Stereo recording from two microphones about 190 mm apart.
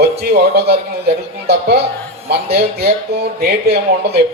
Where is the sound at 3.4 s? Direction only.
55° right (ahead or behind).